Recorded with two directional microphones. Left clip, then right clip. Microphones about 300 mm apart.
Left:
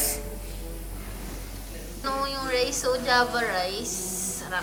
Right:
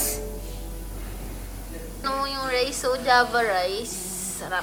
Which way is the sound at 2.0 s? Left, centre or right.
Centre.